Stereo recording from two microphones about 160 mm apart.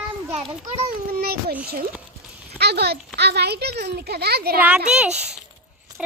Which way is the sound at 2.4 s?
90° right.